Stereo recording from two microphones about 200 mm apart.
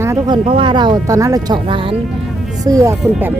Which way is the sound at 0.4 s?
25° right (ahead or behind).